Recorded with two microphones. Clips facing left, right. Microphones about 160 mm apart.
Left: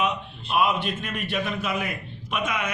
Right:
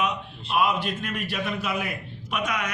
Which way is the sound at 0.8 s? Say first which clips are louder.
Even; centre (ahead or behind).